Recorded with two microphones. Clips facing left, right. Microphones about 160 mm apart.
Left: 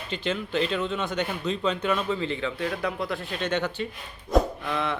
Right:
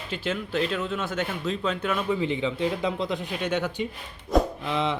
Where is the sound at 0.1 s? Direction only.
5° right (ahead or behind).